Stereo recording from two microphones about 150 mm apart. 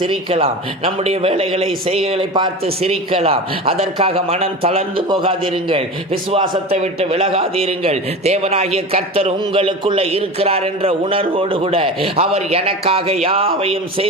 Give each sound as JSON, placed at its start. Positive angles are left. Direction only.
{"t": 0.0, "sound": "a man's voice", "side_deg": -35}
{"t": 6.7, "sound": "a man's voice", "side_deg": -45}